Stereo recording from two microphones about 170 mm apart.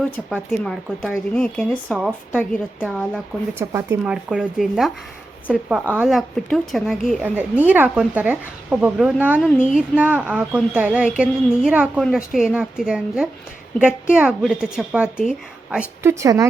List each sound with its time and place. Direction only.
0.0 s speech: centre (ahead or behind)
2.3 s a woman's voice: 10° left (ahead or behind)
2.8 s speech: centre (ahead or behind)
3.6 s speech: 20° right (ahead or behind)
4.0 s speech: 5° right (ahead or behind)
7.2 s speech: 10° right (ahead or behind)
9.4 s a woman's voice: 5° left (ahead or behind)
9.6 s speech: 5° right (ahead or behind)
16.0 s speech: 20° right (ahead or behind)